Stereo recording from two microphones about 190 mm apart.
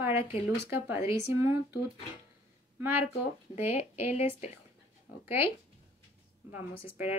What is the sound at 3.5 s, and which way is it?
Speech, 10° right (ahead or behind).